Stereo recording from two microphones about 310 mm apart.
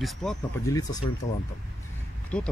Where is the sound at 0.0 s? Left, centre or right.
Centre.